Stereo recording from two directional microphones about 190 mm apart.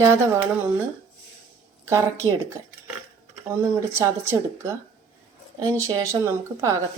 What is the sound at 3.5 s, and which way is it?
Speech, 15° right (ahead or behind).